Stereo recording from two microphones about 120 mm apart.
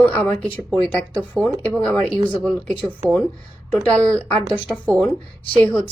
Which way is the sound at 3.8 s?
15° left (ahead or behind).